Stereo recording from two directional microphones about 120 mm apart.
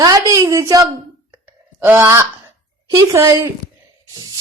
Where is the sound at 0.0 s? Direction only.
30° right (ahead or behind).